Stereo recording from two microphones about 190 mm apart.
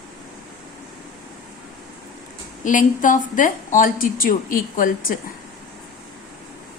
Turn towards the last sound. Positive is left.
turn(degrees=45)  # may be behind; listen again after turning